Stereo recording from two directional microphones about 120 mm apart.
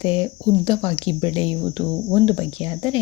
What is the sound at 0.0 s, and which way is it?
Speech, 50° left (ahead or behind).